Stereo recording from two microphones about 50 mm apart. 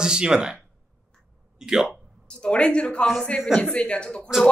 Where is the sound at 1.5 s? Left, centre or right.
Centre.